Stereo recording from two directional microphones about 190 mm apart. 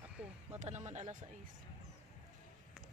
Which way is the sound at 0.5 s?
35° right (ahead or behind).